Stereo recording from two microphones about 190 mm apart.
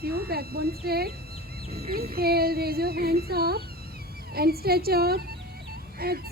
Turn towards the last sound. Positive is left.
turn(degrees=-55)  # may be behind; listen again after turning